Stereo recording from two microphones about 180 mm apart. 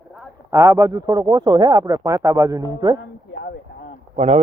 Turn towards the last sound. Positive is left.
turn(degrees=-40)  # may be behind; listen again after turning